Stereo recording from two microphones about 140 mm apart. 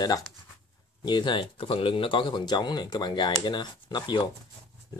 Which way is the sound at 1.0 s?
30° left (ahead or behind).